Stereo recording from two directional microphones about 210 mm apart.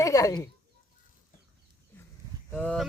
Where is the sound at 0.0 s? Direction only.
15° left (ahead or behind).